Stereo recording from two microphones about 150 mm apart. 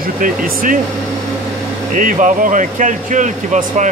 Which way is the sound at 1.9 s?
65° right (ahead or behind).